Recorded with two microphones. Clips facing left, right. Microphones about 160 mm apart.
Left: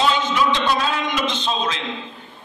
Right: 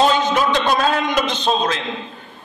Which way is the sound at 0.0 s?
45° right (ahead or behind).